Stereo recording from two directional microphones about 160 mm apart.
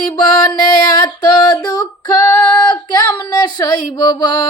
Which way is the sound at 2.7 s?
25° left (ahead or behind).